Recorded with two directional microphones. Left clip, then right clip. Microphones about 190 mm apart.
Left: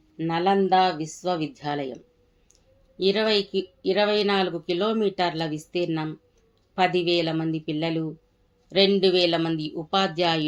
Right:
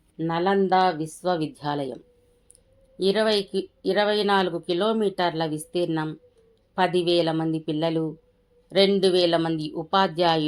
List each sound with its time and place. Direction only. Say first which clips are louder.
0.2 s speech: even; 35° right (ahead or behind)
3.0 s speech: even; 30° right (ahead or behind)